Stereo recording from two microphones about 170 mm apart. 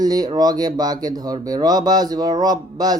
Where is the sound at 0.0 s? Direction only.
20° right (ahead or behind).